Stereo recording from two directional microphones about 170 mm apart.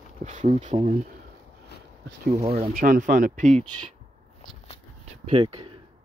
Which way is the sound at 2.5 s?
55° right (ahead or behind).